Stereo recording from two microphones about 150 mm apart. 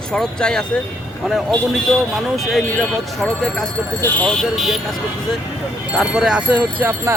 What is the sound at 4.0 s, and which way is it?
Speech, 10° left (ahead or behind).